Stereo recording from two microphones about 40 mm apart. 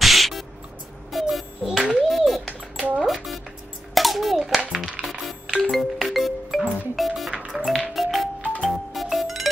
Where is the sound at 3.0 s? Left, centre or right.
Centre.